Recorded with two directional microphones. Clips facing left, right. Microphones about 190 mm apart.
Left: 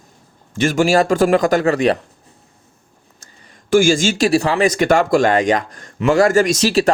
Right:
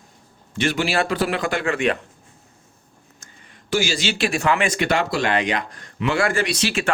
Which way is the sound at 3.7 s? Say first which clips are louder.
Left 9 dB; 50° left (ahead or behind).